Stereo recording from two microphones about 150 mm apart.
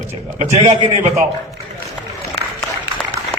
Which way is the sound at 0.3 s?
50° right (ahead or behind).